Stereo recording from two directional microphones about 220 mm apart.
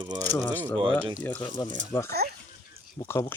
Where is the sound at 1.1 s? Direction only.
10° left (ahead or behind).